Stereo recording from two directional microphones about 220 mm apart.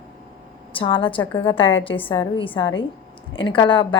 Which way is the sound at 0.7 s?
25° left (ahead or behind).